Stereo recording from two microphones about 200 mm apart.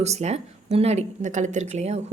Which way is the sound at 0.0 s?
35° right (ahead or behind).